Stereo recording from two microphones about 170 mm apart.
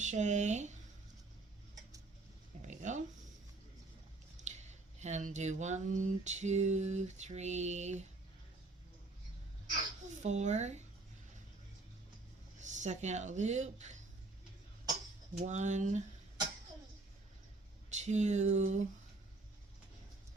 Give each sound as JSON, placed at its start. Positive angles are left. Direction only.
{"t": 0.0, "sound": "speech", "side_deg": -45}
{"t": 2.6, "sound": "a sound", "side_deg": -45}
{"t": 4.4, "sound": "speech", "side_deg": -40}
{"t": 10.2, "sound": "speech", "side_deg": -40}
{"t": 12.5, "sound": "speech", "side_deg": -45}
{"t": 15.4, "sound": "speech", "side_deg": -45}
{"t": 17.9, "sound": "speech", "side_deg": -45}